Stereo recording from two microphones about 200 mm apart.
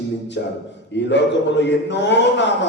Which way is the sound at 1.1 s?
60° left (ahead or behind).